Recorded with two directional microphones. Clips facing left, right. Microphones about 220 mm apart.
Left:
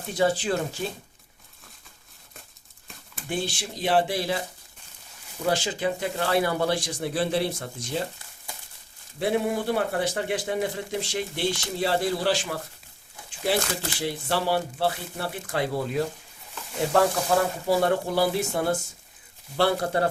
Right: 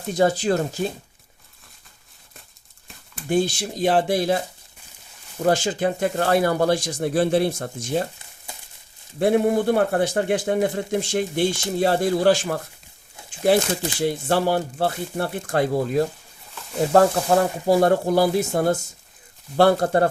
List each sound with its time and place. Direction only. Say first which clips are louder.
0.2 s speech: right 4 dB; 45° right (ahead or behind)
3.2 s speech: right 9 dB; 45° right (ahead or behind)
5.4 s speech: right 5 dB; 50° right (ahead or behind)
9.1 s speech: right 7 dB; 50° right (ahead or behind)
14.0 s speech: right 6 dB; 45° right (ahead or behind)